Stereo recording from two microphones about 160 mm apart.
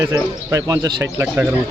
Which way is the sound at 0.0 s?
20° right (ahead or behind).